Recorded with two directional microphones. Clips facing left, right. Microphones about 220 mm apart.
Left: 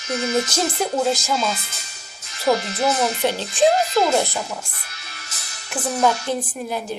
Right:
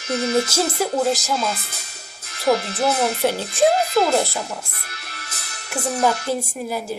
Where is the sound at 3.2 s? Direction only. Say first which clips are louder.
Even; 10° right (ahead or behind).